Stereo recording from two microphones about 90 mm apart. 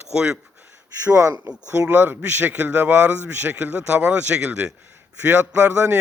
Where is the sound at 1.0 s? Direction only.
35° right (ahead or behind).